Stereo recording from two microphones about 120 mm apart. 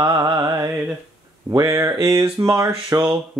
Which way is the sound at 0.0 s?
30° right (ahead or behind).